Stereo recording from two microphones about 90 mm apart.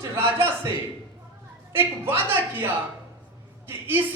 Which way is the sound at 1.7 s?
25° right (ahead or behind).